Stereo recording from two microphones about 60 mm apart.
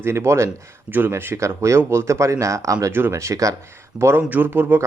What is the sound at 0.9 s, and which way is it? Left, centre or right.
Speech, right.